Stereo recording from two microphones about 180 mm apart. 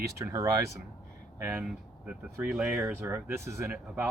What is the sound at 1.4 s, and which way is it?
Speech, 10° right (ahead or behind).